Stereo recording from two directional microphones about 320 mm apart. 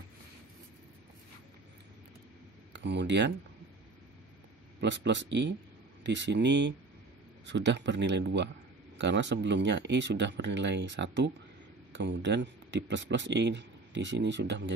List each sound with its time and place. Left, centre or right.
2.7 s speech: right
4.7 s speech: right